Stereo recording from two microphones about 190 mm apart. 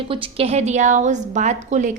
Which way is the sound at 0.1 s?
30° right (ahead or behind).